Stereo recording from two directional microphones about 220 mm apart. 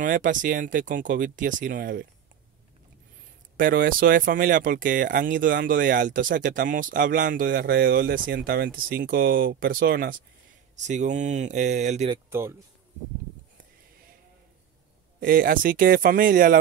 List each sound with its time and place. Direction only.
0.0 s speech: 35° right (ahead or behind)
3.5 s speech: 40° right (ahead or behind)
12.1 s speech: 10° right (ahead or behind)
15.1 s speech: 40° right (ahead or behind)